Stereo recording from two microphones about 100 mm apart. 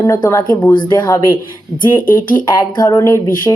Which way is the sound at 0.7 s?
45° left (ahead or behind).